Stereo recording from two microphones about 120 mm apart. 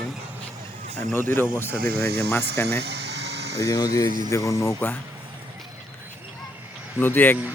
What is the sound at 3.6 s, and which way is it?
Speech, 30° left (ahead or behind).